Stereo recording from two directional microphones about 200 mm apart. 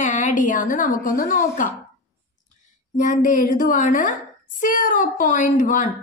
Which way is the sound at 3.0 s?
40° left (ahead or behind).